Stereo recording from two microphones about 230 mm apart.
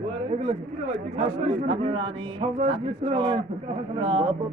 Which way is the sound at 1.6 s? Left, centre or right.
Right.